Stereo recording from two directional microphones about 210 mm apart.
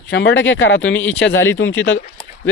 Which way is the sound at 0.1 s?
55° left (ahead or behind).